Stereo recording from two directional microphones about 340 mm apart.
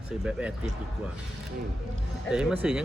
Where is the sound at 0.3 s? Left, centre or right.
Centre.